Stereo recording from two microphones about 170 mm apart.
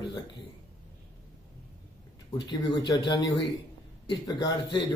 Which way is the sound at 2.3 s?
25° left (ahead or behind).